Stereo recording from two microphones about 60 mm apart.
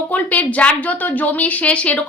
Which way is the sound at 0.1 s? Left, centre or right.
Left.